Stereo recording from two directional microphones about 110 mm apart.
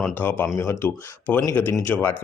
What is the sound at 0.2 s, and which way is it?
Speech, 15° left (ahead or behind).